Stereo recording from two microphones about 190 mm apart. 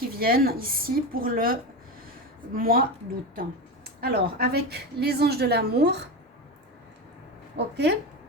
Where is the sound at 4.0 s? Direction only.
55° right (ahead or behind).